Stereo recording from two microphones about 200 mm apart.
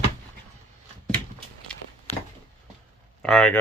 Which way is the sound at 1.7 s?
5° left (ahead or behind).